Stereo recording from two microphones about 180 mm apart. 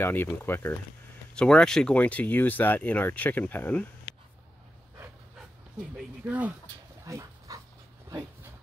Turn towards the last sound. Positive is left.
turn(degrees=-20)  # may be behind; listen again after turning